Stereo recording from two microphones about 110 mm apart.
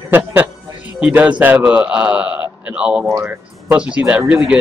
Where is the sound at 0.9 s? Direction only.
10° right (ahead or behind).